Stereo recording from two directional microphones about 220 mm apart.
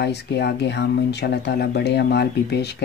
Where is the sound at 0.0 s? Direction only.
50° left (ahead or behind).